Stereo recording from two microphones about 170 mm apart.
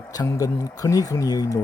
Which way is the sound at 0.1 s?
20° left (ahead or behind).